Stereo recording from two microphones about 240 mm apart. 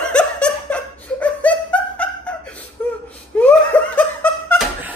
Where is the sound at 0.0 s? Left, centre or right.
Centre.